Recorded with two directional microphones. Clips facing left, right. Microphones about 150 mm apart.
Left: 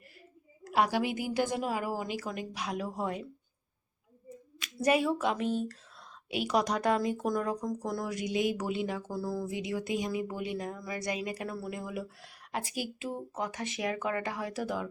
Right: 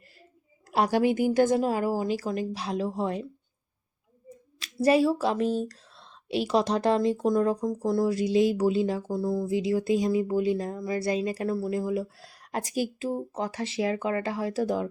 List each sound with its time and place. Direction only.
0.6 s a sound: 35° right (ahead or behind)
1.1 s speech: 50° right (ahead or behind); by 3.2 s 30° right (ahead or behind)
4.6 s speech: 35° right (ahead or behind)